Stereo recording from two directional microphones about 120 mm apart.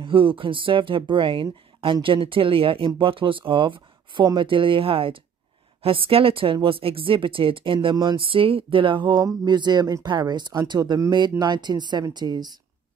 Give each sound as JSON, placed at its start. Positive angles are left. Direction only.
{"t": 0.0, "sound": "speech", "side_deg": -45}